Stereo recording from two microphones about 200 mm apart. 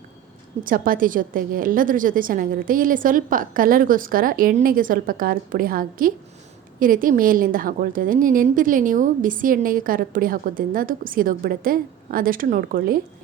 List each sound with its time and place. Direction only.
0.6 s a woman's voice: 45° right (ahead or behind)